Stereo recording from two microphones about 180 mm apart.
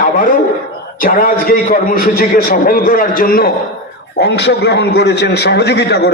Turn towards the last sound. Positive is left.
turn(degrees=65)  # may be behind; listen again after turning